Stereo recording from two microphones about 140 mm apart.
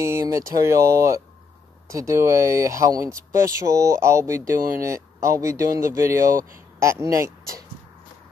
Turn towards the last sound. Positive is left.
turn(degrees=-20)  # may be behind; listen again after turning